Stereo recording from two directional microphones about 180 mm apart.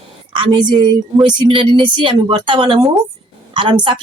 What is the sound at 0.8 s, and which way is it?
Speech, 25° right (ahead or behind).